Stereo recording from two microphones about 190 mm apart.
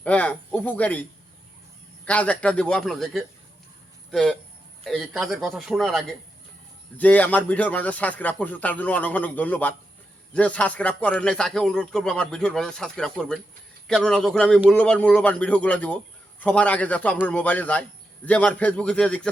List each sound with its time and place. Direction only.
0.0 s a man's voice: 10° left (ahead or behind)
2.0 s a man's voice: 5° left (ahead or behind)